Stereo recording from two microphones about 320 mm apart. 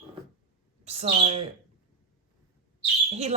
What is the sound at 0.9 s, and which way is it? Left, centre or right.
Speech, centre.